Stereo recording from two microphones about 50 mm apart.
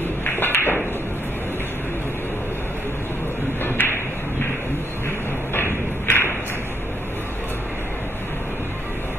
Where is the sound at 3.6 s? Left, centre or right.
Left.